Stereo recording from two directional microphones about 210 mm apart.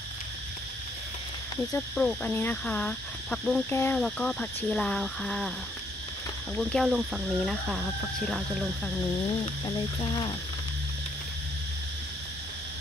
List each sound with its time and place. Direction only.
2.0 s speech: 5° left (ahead or behind)
6.6 s speech: centre (ahead or behind)
9.7 s speech: 20° left (ahead or behind)